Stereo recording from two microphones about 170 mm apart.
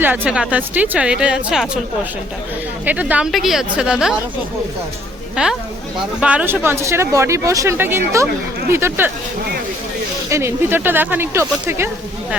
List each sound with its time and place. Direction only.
0.0 s speech: 10° right (ahead or behind)
2.8 s speech: 10° right (ahead or behind)
5.4 s speech: 5° right (ahead or behind)
10.2 s speech: 15° right (ahead or behind)